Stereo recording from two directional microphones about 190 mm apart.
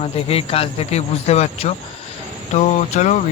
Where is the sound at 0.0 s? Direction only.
30° left (ahead or behind).